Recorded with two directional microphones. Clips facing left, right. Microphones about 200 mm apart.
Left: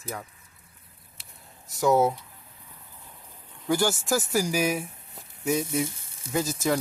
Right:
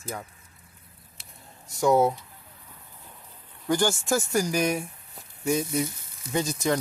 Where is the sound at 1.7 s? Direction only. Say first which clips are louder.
Right 1 dB; centre (ahead or behind).